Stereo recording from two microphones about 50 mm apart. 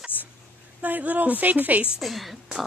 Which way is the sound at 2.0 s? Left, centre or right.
Centre.